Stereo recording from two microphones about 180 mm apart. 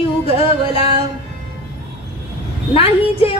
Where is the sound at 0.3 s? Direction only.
30° left (ahead or behind).